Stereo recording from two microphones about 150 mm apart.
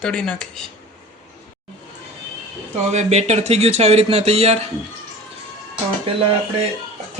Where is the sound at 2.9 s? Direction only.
50° right (ahead or behind).